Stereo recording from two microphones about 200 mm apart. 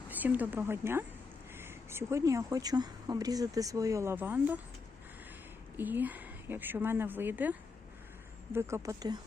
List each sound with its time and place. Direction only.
0.1 s speech: 10° right (ahead or behind)
5.7 s a woman's voice: 10° right (ahead or behind)
8.5 s speech: 15° right (ahead or behind)